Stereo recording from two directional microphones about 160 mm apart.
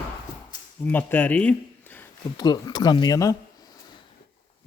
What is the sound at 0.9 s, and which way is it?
Speech, 10° left (ahead or behind).